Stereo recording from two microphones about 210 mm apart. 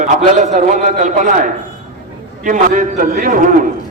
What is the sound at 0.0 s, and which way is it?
A man's voice, 35° right (ahead or behind).